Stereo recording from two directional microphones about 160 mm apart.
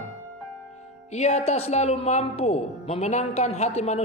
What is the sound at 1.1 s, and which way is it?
Speech, 45° left (ahead or behind).